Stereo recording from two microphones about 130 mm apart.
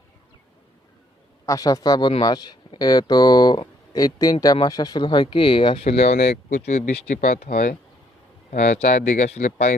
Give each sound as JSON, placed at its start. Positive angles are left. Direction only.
{"t": 1.5, "sound": "a man's voice", "side_deg": 25}
{"t": 6.5, "sound": "speech", "side_deg": 60}
{"t": 8.5, "sound": "speech", "side_deg": 60}